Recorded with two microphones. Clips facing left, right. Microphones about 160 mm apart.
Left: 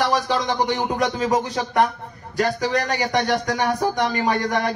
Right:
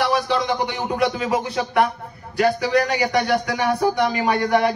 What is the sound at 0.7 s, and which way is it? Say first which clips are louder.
Speech: even; 40° left (ahead or behind).